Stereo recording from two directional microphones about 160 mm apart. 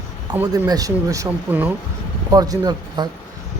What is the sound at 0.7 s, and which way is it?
Speech, 20° right (ahead or behind).